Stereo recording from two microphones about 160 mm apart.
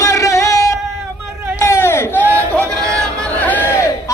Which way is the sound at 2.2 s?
15° right (ahead or behind).